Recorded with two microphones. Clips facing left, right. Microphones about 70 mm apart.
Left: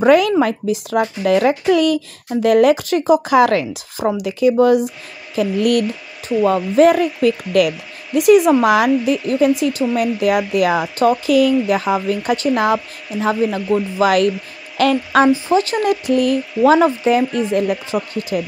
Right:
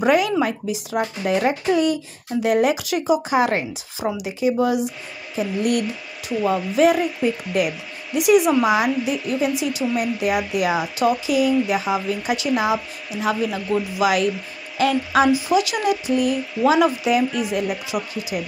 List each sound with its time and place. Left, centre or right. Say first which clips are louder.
0.0 s a child's voice: left 6 dB; left
2.4 s speech: left 7 dB; left
3.3 s a child's voice: left 6 dB; left
4.0 s speech: left 6 dB; left
4.3 s a child's voice: left 7 dB; left
6.2 s speech: left 5 dB; left
7.2 s speech: left 6 dB; left
8.1 s speech: left 5 dB; left
13.2 s speech: left 5 dB; left
13.9 s speech: left 5 dB; left
15.5 s speech: left 3 dB; left
16.8 s speech: left 4 dB; left
18.3 s speech: left 6 dB; left